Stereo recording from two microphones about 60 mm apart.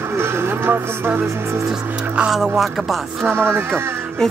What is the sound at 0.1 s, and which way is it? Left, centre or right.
Speech, right.